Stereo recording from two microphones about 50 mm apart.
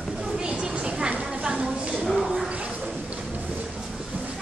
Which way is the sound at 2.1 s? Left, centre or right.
Centre.